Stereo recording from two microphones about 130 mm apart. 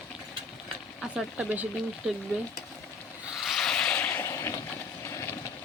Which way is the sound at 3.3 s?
Centre (ahead or behind).